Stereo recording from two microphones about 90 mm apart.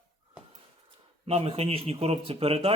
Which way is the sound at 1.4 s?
90° right.